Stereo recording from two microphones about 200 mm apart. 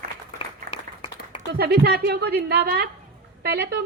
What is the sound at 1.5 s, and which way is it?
A woman's voice, 50° right (ahead or behind).